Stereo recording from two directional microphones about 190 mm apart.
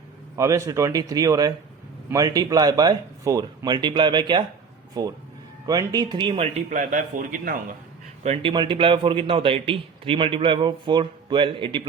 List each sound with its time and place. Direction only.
0.3 s a man's voice: 15° right (ahead or behind); by 7.5 s 45° right (ahead or behind)
8.2 s a man's voice: 30° right (ahead or behind)